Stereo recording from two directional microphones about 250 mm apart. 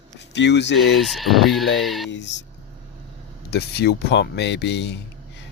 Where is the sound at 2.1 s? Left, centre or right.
Left.